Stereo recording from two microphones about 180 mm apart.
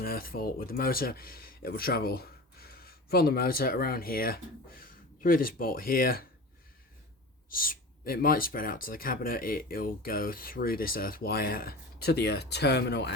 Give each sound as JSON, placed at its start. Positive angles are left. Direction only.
{"t": 0.0, "sound": "speech", "side_deg": 55}
{"t": 7.5, "sound": "speech", "side_deg": 55}